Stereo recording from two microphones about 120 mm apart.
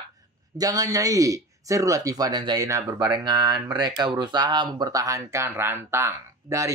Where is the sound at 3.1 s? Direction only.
35° right (ahead or behind).